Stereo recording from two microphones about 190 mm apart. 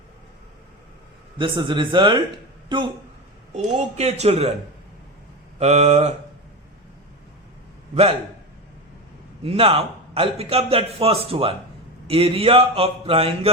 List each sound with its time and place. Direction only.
1.4 s speech: 25° right (ahead or behind)
3.5 s a man's voice: 35° right (ahead or behind)
5.5 s a man's voice: 35° right (ahead or behind)
9.4 s a man's voice: 30° right (ahead or behind)